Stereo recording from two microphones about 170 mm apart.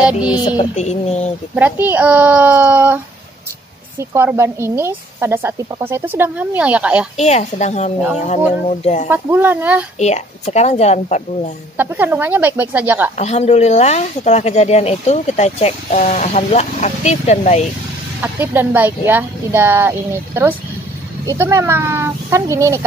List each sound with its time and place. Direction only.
0.0 s music: 5° right (ahead or behind)
0.4 s a sound: 25° left (ahead or behind)
0.7 s speech: 40° left (ahead or behind)
1.5 s speech: 10° right (ahead or behind)
4.0 s speech: 15° right (ahead or behind)
7.2 s speech: 40° left (ahead or behind)
9.1 s speech: 10° right (ahead or behind)
9.9 s speech: 40° left (ahead or behind)
11.7 s speech: 10° right (ahead or behind)
13.2 s speech: 40° left (ahead or behind)
18.2 s speech: 10° right (ahead or behind)